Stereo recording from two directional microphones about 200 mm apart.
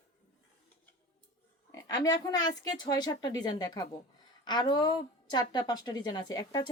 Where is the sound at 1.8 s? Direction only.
20° left (ahead or behind).